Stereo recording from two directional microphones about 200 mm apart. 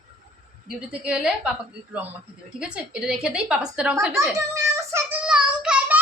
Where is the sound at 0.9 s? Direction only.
5° right (ahead or behind).